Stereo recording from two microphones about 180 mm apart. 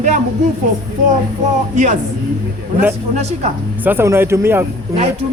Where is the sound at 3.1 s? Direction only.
35° right (ahead or behind).